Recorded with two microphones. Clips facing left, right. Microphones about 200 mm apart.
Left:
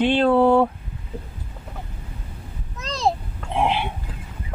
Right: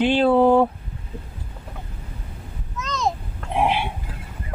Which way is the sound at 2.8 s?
35° left (ahead or behind).